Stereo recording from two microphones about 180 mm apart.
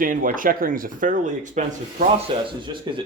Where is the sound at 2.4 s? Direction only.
25° right (ahead or behind).